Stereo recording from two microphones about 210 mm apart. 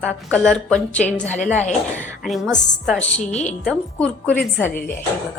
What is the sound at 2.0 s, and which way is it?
A woman's voice, centre (ahead or behind).